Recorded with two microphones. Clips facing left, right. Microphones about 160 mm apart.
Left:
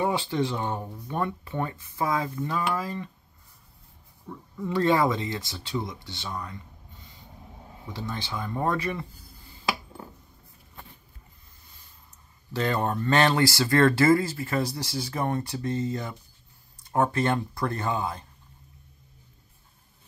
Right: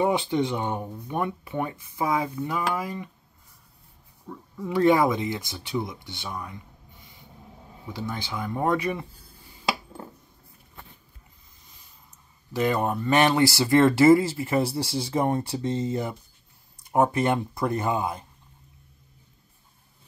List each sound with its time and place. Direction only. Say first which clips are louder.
0.0 s speech: right 3 dB; 20° right (ahead or behind)
4.3 s speech: even; 10° right (ahead or behind)
7.9 s speech: right 2 dB; 10° right (ahead or behind)
12.5 s speech: right 2 dB; 10° right (ahead or behind)